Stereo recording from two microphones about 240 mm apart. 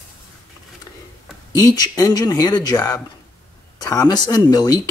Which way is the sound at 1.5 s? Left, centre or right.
Centre.